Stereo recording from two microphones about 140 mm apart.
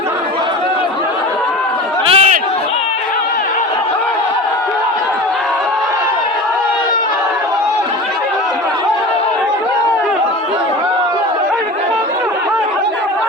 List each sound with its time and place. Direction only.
2.0 s chatter: 45° right (ahead or behind)